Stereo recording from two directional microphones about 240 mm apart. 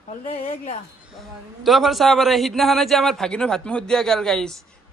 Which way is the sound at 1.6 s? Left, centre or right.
Centre.